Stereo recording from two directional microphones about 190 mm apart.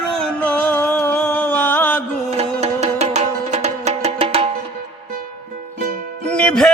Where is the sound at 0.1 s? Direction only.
5° left (ahead or behind).